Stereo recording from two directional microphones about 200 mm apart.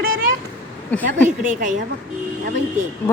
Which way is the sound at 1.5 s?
40° right (ahead or behind).